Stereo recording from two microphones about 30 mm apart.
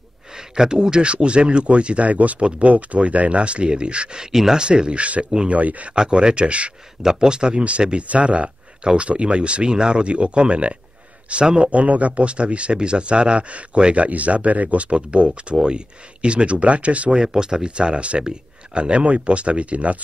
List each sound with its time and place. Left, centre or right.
0.4 s speech: right
1.1 s speech: right
2.0 s speech: right
4.2 s speech: centre
4.6 s speech: right
5.5 s speech: right
5.9 s speech: right
7.0 s speech: centre
8.1 s speech: right
11.6 s speech: right
17.3 s speech: right
17.6 s speech: right